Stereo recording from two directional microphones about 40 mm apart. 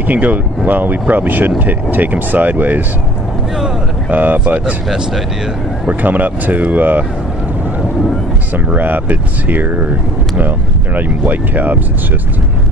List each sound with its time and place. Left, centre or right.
0.0 s speech: right
4.1 s speech: right
6.0 s speech: right
8.7 s speech: right